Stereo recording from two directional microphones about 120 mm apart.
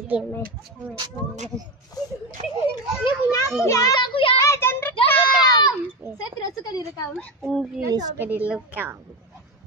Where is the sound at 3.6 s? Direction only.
25° left (ahead or behind).